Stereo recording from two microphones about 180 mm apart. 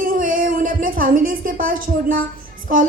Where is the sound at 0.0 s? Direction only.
50° right (ahead or behind).